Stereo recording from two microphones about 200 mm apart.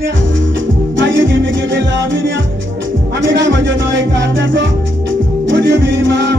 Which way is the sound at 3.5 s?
65° right (ahead or behind).